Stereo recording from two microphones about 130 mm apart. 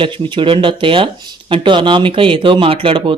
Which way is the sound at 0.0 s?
40° right (ahead or behind).